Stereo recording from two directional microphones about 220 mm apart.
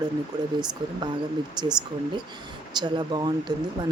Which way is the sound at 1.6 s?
20° right (ahead or behind).